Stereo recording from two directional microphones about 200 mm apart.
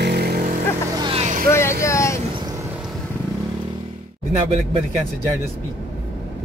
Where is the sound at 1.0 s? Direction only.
30° right (ahead or behind).